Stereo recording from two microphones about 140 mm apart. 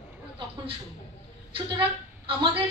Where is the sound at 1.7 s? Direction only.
40° right (ahead or behind).